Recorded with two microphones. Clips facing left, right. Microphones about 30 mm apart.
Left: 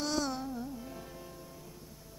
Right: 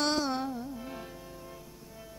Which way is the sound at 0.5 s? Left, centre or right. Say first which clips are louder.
Right 2 dB; right.